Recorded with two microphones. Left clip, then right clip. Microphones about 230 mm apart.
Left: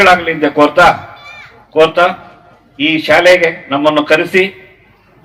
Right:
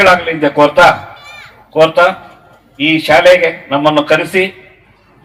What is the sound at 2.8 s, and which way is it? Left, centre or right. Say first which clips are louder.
A man's voice: right 1 dB; left.